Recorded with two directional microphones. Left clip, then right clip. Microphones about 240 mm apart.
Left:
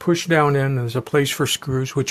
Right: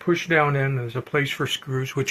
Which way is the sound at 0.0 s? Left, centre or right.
Left.